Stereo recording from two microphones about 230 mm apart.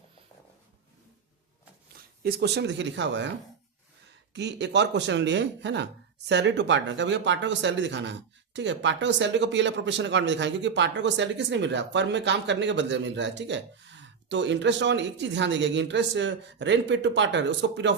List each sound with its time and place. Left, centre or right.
2.2 s speech: right
4.4 s speech: right